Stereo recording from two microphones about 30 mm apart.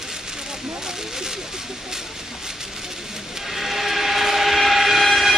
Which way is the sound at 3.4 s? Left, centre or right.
Centre.